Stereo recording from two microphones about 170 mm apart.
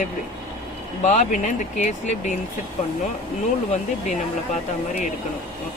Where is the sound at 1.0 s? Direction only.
45° left (ahead or behind).